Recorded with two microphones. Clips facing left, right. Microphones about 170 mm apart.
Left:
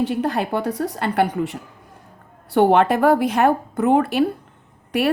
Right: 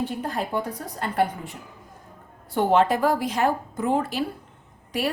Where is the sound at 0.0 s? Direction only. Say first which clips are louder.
Left 7 dB; 75° left (ahead or behind).